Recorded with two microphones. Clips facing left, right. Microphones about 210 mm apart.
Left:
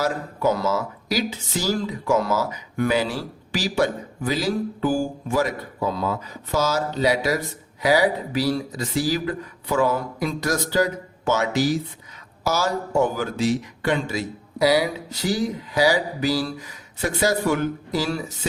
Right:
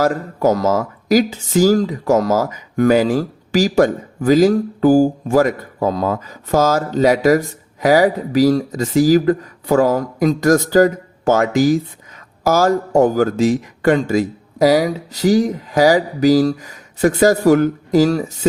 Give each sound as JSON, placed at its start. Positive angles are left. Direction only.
{"t": 0.0, "sound": "speech", "side_deg": -45}